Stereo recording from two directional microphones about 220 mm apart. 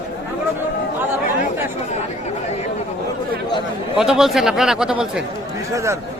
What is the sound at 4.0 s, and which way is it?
A man's voice, centre (ahead or behind).